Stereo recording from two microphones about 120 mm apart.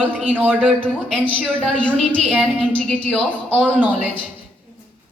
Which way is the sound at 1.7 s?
10° left (ahead or behind).